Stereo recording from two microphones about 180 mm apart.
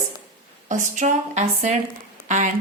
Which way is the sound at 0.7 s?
45° right (ahead or behind).